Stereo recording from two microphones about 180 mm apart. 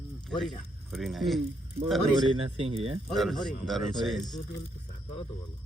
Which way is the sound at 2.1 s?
30° right (ahead or behind).